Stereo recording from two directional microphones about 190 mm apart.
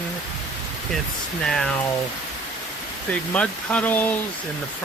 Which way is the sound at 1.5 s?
Centre (ahead or behind).